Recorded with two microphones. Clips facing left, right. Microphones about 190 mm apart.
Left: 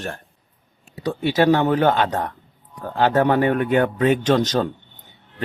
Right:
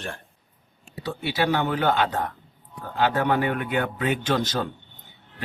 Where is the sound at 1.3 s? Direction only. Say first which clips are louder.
Left 7 dB; 40° left (ahead or behind).